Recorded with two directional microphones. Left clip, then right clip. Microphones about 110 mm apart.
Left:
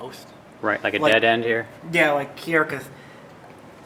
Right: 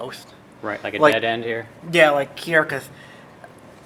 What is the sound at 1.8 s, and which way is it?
Speech, 20° right (ahead or behind).